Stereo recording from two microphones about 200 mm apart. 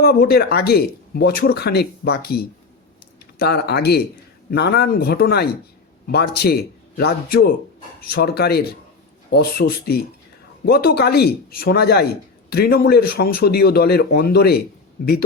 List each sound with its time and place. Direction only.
0.0 s speech: 50° left (ahead or behind)